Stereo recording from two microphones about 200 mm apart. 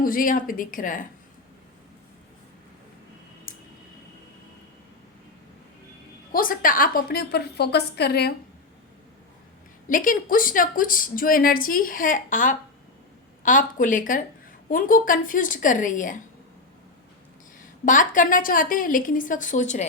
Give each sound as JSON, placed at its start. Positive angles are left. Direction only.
{"t": 0.0, "sound": "a woman's voice", "side_deg": 45}
{"t": 3.5, "sound": "tick", "side_deg": 45}
{"t": 6.3, "sound": "a woman's voice", "side_deg": 45}
{"t": 9.9, "sound": "a woman's voice", "side_deg": 40}
{"t": 17.6, "sound": "a woman's voice", "side_deg": 40}